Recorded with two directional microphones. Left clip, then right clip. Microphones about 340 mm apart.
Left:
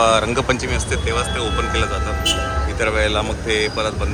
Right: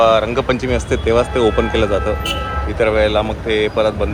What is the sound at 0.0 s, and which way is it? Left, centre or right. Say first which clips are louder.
Speech: right 3 dB; centre.